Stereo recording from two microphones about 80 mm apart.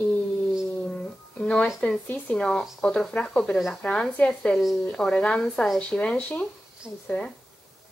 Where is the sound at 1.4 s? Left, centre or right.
Centre.